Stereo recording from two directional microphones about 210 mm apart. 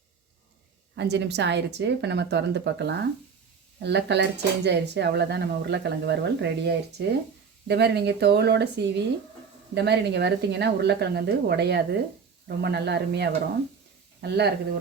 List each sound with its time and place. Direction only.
0.9 s speech: 55° right (ahead or behind)